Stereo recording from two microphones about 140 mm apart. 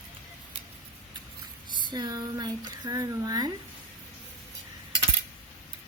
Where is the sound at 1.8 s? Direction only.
30° right (ahead or behind).